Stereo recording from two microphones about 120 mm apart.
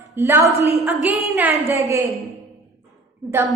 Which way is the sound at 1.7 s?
25° right (ahead or behind).